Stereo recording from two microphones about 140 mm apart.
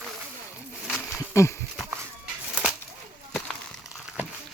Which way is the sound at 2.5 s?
5° right (ahead or behind).